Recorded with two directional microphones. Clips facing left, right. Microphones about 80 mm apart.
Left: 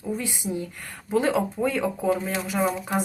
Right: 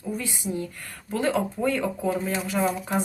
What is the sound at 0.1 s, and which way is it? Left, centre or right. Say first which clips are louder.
Speech: left 1 dB; left.